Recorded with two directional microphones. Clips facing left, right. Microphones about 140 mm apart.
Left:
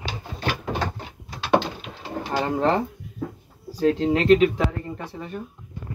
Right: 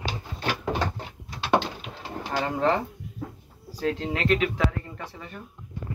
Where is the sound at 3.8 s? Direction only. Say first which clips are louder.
Left 7 dB; 30° left (ahead or behind).